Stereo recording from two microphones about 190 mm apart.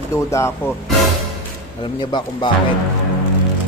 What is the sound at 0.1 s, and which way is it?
Speech, 15° left (ahead or behind).